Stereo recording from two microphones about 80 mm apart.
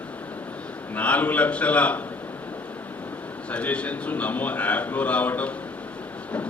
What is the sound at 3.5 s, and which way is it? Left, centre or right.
A man's voice, centre.